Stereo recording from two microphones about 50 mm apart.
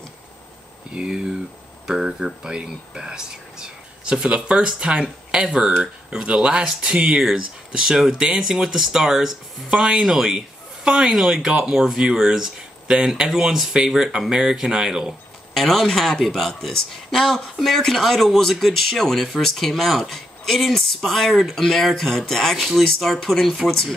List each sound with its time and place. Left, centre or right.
0.9 s a man's voice: centre
15.5 s speech: centre